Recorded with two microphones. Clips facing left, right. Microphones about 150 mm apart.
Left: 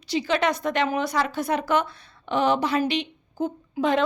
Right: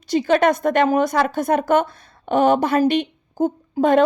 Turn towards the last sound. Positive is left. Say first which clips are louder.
# right 7 dB
turn(degrees=-50)  # may be behind; listen again after turning